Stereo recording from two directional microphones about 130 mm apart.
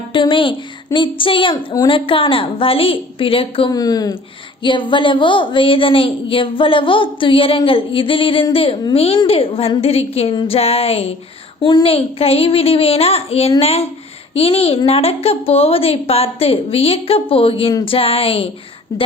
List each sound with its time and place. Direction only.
0.1 s speech: 40° left (ahead or behind)
0.9 s a sound: 40° left (ahead or behind)
1.9 s a woman's voice: 40° left (ahead or behind)
3.7 s a woman's voice: 30° left (ahead or behind); by 11.1 s 50° left (ahead or behind)
11.6 s a sound: 35° left (ahead or behind)
11.9 s a woman's voice: 45° left (ahead or behind)
18.9 s speech: 30° left (ahead or behind)